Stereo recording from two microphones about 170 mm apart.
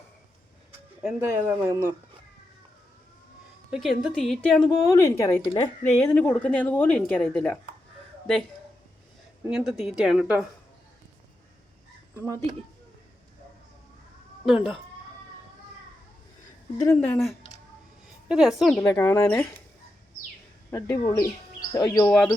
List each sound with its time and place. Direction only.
1.0 s speech: 15° right (ahead or behind)
3.7 s a woman's voice: centre (ahead or behind)
4.9 s a woman's voice: 15° left (ahead or behind)
6.1 s a woman's voice: 10° left (ahead or behind)
9.6 s a woman's voice: 5° right (ahead or behind)
12.1 s speech: 15° right (ahead or behind)
14.4 s speech: centre (ahead or behind)
16.8 s a woman's voice: 10° left (ahead or behind)
19.0 s a woman's voice: 15° left (ahead or behind)
20.7 s speech: 20° left (ahead or behind)
22.0 s a woman's voice: 5° left (ahead or behind)